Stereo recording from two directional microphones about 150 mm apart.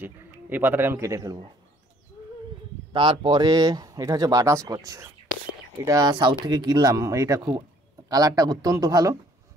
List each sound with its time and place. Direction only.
0.0 s speech: 15° right (ahead or behind)
2.9 s speech: 35° right (ahead or behind)